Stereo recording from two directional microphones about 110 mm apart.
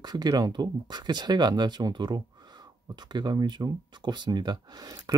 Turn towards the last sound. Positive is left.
turn(degrees=-35)  # may be behind; listen again after turning